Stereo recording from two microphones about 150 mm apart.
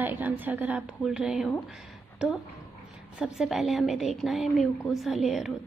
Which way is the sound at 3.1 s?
5° right (ahead or behind).